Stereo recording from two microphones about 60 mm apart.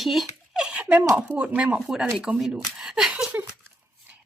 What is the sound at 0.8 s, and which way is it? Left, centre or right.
Speech, right.